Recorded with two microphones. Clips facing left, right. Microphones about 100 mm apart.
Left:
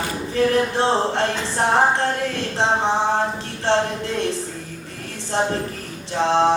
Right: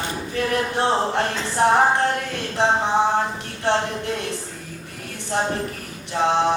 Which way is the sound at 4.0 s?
30° left (ahead or behind).